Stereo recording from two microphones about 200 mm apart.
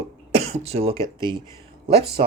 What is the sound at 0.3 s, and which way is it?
Speech, 30° right (ahead or behind).